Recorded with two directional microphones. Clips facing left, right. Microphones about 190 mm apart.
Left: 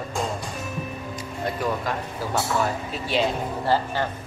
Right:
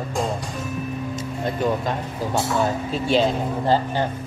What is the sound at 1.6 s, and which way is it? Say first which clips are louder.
Speech: right 5 dB; 25° right (ahead or behind).